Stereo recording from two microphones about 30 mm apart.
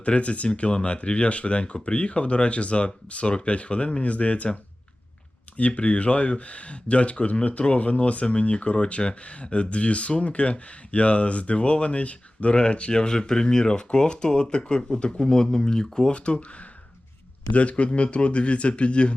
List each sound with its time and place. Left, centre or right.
0.0 s speech: left
5.5 s speech: left
12.9 s speech: left
16.1 s speech: left
17.5 s speech: left